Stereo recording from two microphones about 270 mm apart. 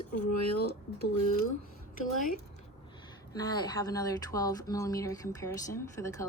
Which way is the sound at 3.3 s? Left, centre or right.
Centre.